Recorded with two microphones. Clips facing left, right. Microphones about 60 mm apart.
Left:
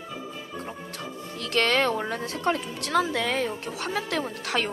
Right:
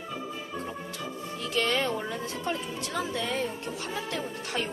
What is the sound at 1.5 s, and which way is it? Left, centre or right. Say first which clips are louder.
Speech: left 5 dB; left.